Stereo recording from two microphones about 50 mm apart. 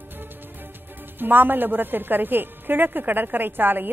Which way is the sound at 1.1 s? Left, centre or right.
Right.